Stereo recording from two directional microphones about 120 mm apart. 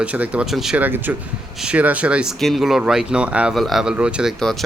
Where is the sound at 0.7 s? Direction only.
15° right (ahead or behind).